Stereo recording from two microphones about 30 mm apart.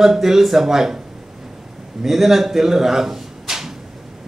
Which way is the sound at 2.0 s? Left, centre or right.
Centre.